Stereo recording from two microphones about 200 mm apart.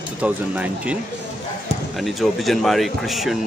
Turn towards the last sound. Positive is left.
turn(degrees=0)  # may be behind; listen again after turning